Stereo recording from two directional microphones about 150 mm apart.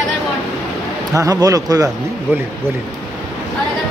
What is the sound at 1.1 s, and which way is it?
Speech, 25° right (ahead or behind).